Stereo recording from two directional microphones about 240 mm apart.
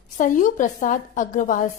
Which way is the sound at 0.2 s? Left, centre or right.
Left.